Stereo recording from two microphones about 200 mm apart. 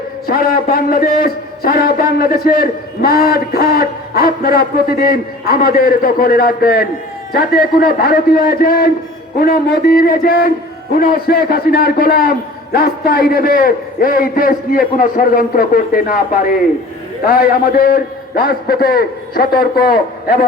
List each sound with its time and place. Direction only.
0.3 s a man's voice: 45° left (ahead or behind)